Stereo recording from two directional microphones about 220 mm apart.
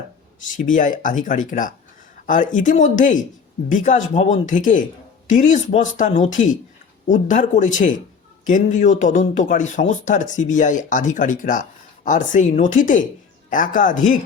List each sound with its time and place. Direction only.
0.4 s speech: 35° left (ahead or behind)